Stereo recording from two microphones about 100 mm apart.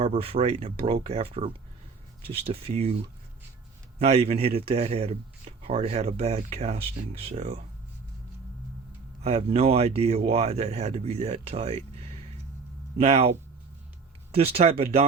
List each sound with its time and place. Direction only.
0.0 s a man's voice: 85° right
9.2 s a man's voice: 90° right
14.3 s speech: 80° right